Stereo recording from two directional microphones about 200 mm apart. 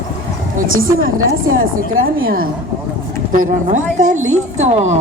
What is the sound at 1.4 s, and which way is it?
A woman's voice, 45° right (ahead or behind).